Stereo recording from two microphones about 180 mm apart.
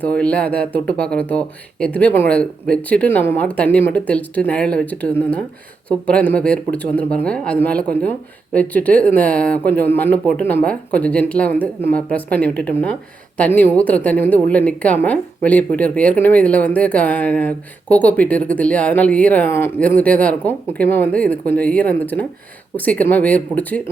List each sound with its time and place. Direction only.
0.0 s speech: 5° left (ahead or behind)